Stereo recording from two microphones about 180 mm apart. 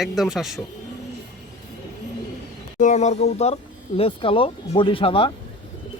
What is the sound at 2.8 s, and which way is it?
Speech, 40° left (ahead or behind).